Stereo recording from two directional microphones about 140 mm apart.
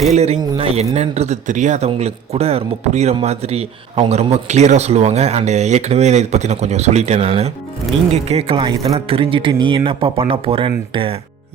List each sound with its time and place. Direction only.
0.1 s speech: 50° right (ahead or behind); by 9.0 s 30° right (ahead or behind)
9.0 s speech: 40° right (ahead or behind)